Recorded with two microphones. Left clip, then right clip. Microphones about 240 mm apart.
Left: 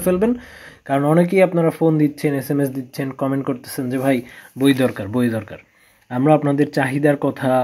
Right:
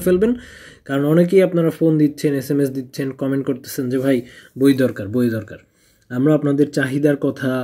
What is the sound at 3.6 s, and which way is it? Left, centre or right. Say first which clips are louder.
Speech: right 1 dB; left.